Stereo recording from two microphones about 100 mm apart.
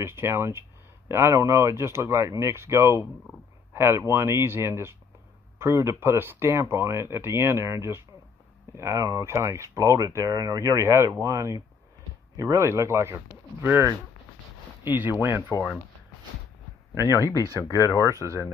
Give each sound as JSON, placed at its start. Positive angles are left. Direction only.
{"t": 0.0, "sound": "speech", "side_deg": -25}
{"t": 17.1, "sound": "speech", "side_deg": 30}